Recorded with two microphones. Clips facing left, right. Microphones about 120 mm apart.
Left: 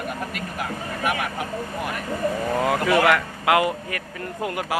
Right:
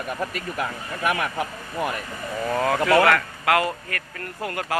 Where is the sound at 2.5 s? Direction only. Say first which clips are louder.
Right 3 dB; 10° left (ahead or behind).